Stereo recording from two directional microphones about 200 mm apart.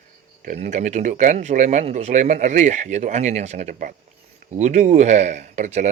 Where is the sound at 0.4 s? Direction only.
35° right (ahead or behind).